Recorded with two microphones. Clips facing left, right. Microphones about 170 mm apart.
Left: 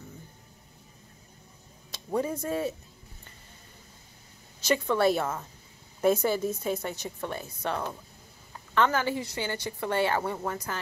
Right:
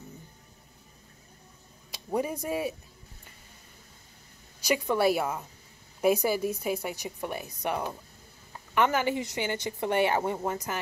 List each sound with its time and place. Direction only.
1.9 s speech: 15° right (ahead or behind)
4.6 s a woman's voice: 10° right (ahead or behind)